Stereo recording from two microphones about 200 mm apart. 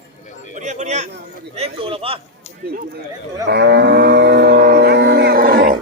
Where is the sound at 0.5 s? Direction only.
35° right (ahead or behind).